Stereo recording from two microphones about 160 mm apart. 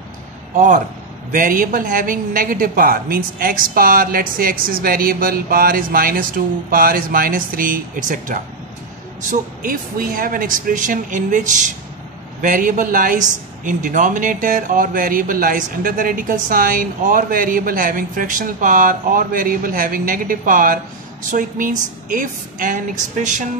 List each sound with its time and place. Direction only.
1.3 s speech: 60° right (ahead or behind)